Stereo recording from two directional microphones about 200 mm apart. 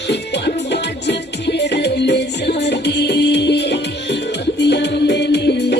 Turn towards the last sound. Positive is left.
turn(degrees=55)  # may be behind; listen again after turning